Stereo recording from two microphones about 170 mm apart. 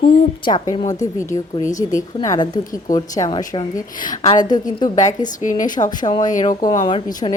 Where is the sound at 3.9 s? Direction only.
50° left (ahead or behind).